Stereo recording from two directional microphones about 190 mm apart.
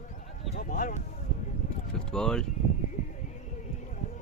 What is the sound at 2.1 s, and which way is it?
Speech, 5° left (ahead or behind).